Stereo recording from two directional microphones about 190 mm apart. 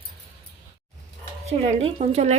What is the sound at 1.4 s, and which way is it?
Speech, 35° right (ahead or behind).